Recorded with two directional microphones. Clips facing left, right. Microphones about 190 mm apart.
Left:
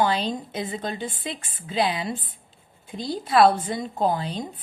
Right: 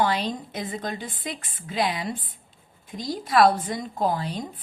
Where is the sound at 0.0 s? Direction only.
25° left (ahead or behind).